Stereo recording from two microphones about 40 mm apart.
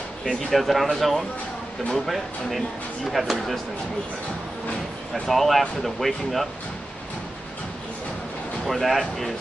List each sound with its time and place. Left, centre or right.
0.2 s speech: centre
5.1 s speech: centre
8.6 s speech: centre